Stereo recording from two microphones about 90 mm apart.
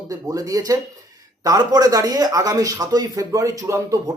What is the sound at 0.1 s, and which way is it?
Speech, 40° right (ahead or behind).